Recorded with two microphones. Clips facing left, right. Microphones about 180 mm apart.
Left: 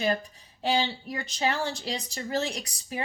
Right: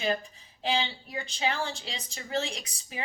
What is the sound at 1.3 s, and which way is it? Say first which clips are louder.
A woman's voice: left 3 dB; 45° left (ahead or behind).